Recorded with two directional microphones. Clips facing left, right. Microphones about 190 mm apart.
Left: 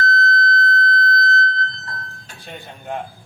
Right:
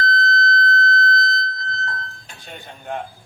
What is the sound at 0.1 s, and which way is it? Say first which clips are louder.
Fire alarm: left 1 dB; 25° right (ahead or behind).